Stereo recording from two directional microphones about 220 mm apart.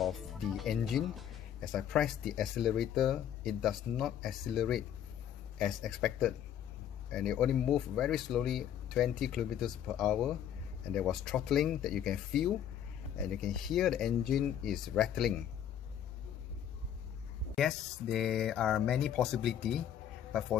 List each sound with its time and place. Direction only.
0.6 s speech: centre (ahead or behind)
17.6 s speech: centre (ahead or behind)